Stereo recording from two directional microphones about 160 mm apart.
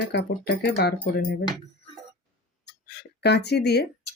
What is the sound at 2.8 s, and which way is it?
Speech, 90° left.